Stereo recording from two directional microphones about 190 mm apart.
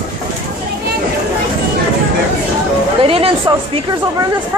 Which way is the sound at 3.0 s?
30° right (ahead or behind).